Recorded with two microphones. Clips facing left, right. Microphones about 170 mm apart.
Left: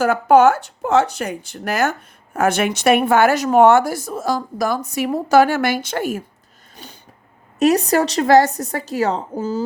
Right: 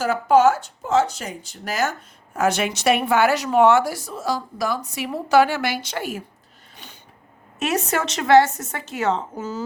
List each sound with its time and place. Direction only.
0.0 s speech: 60° left (ahead or behind)
7.6 s a woman's voice: 35° left (ahead or behind)